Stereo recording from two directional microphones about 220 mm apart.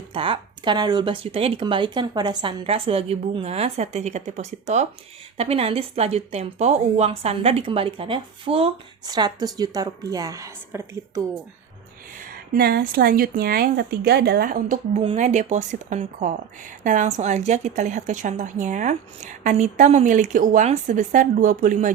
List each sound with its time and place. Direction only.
0.1 s a woman's voice: 25° right (ahead or behind)
12.2 s a woman's voice: 45° right (ahead or behind)